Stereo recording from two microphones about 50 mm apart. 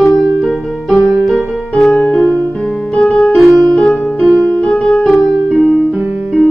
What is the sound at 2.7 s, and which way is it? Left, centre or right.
Piano, centre.